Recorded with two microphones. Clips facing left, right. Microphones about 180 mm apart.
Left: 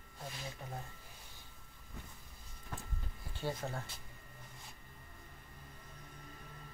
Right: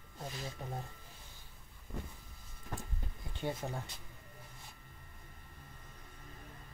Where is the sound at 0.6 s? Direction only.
30° right (ahead or behind).